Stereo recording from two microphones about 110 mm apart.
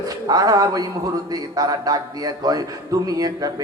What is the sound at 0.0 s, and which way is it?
A man's voice, 35° right (ahead or behind).